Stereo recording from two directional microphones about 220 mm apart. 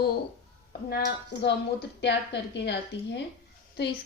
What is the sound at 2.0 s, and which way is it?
A woman's voice, 50° left (ahead or behind).